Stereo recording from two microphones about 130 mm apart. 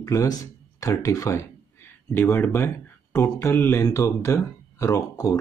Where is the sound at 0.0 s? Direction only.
25° left (ahead or behind).